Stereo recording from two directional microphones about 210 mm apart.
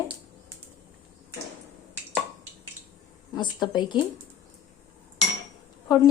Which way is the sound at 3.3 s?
20° left (ahead or behind).